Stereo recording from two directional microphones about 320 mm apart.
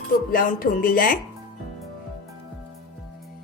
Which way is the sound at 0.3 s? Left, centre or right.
Left.